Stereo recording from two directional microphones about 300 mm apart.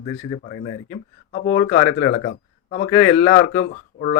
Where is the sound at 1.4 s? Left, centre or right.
Left.